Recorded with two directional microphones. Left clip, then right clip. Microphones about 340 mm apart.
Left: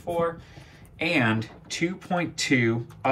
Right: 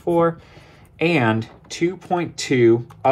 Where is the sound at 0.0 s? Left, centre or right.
Right.